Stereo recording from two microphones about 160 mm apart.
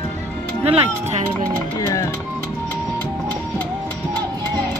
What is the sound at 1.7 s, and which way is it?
Speech, 20° left (ahead or behind).